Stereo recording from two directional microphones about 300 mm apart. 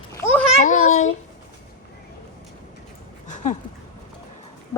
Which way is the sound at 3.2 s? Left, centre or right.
Left.